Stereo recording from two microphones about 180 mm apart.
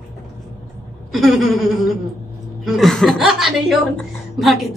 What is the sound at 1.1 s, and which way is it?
A woman's voice, centre (ahead or behind).